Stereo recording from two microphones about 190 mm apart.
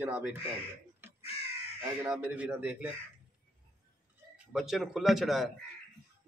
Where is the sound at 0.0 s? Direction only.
10° right (ahead or behind).